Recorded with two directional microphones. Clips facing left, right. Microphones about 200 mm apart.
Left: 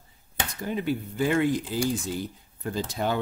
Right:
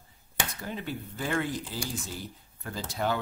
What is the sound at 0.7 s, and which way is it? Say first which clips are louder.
Speech: left 11 dB; 15° left (ahead or behind).